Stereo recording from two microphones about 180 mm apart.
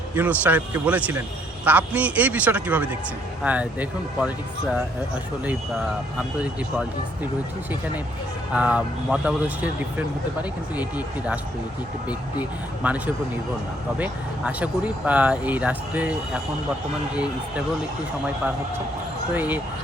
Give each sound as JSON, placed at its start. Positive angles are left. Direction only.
{"t": 0.2, "sound": "speech", "side_deg": -10}
{"t": 6.1, "sound": "speech", "side_deg": -5}
{"t": 8.5, "sound": "speech", "side_deg": -5}
{"t": 10.8, "sound": "speech", "side_deg": -10}
{"t": 19.3, "sound": "speech", "side_deg": -10}